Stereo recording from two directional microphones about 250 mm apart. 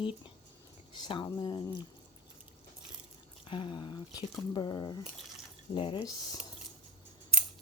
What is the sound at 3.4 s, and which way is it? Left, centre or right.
Speech, centre.